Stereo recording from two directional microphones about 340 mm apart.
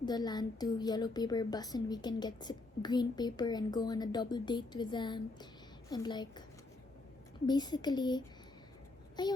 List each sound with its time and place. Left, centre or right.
0.0 s a woman's voice: centre
7.4 s a woman's voice: centre